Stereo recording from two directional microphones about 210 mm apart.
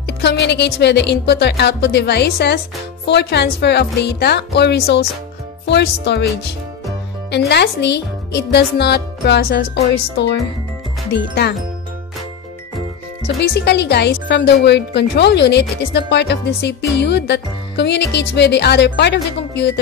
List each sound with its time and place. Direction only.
0.0 s music: 55° left (ahead or behind)
13.4 s music: 55° left (ahead or behind)